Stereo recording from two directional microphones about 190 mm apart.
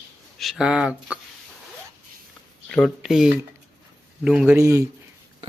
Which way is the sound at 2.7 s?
Centre (ahead or behind).